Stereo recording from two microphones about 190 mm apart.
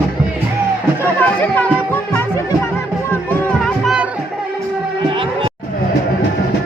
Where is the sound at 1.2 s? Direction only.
10° left (ahead or behind).